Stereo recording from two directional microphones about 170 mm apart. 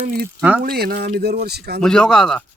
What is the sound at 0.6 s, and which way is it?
Speech, 70° right (ahead or behind).